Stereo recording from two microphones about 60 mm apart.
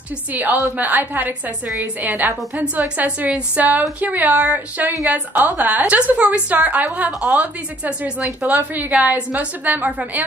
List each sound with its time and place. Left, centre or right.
0.3 s a woman's voice: right
7.1 s a woman's voice: centre
7.3 s a woman's voice: right